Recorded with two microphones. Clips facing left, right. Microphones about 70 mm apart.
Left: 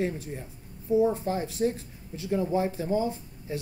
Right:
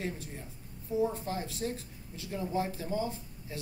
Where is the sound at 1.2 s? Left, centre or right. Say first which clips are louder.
Left 8 dB; left.